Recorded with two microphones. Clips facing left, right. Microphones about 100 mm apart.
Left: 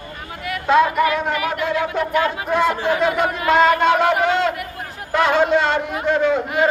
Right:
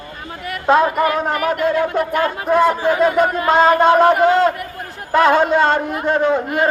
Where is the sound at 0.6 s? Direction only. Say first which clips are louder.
Right 1 dB; 40° right (ahead or behind).